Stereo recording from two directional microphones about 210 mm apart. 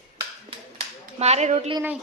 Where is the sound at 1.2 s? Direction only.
30° right (ahead or behind).